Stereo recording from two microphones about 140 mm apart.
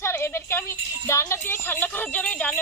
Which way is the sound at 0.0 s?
20° left (ahead or behind).